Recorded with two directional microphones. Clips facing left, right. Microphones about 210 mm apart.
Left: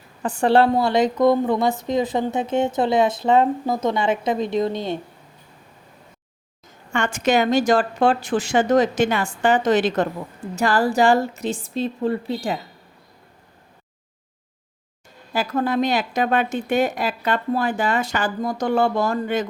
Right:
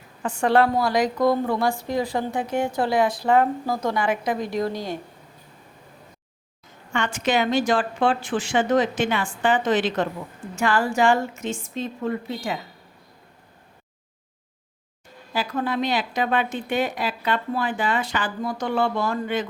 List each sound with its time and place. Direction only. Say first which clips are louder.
0.2 s a woman's voice: left 3 dB; 35° left (ahead or behind)
6.9 s a woman's voice: left 3 dB; 45° left (ahead or behind)
15.3 s a woman's voice: left 4 dB; 45° left (ahead or behind)